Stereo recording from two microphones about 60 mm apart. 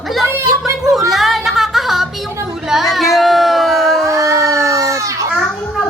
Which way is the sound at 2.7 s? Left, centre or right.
Centre.